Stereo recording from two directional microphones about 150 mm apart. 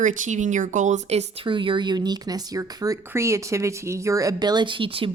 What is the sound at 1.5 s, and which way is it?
Speech, 35° right (ahead or behind).